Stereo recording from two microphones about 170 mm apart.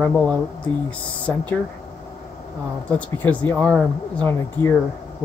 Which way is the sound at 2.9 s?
10° left (ahead or behind).